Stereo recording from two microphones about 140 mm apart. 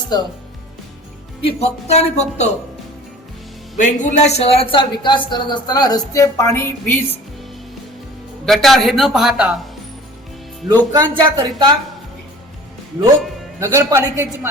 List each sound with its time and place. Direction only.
0.1 s speech: 30° left (ahead or behind)
1.4 s speech: 45° left (ahead or behind)
3.8 s speech: 65° left (ahead or behind); by 7.0 s 15° left (ahead or behind)
8.4 s speech: centre (ahead or behind)
10.9 s speech: 30° right (ahead or behind)
13.6 s a man's voice: 20° right (ahead or behind)